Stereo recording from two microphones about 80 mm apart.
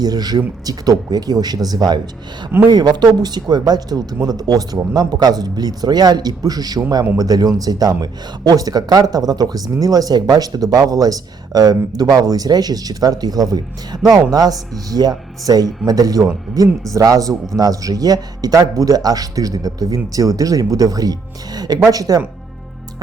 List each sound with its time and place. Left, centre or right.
0.0 s a man's voice: right